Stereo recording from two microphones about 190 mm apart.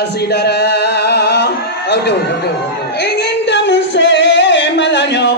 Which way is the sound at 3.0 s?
65° left (ahead or behind).